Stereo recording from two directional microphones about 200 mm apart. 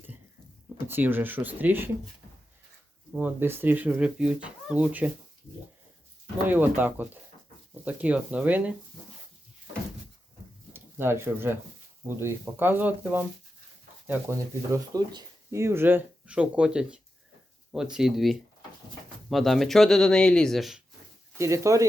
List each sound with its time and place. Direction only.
0.9 s speech: 10° right (ahead or behind)
3.1 s speech: 10° right (ahead or behind)
6.5 s speech: 10° right (ahead or behind)
10.7 s speech: 10° right (ahead or behind)
21.3 s speech: 15° right (ahead or behind)